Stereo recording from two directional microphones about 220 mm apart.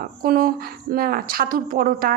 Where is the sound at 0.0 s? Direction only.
40° right (ahead or behind).